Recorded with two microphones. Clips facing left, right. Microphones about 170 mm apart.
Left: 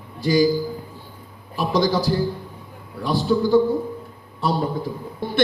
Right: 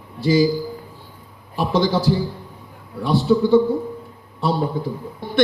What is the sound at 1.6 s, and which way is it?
A man's voice, 25° right (ahead or behind).